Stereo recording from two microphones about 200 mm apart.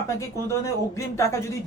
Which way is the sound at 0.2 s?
15° left (ahead or behind).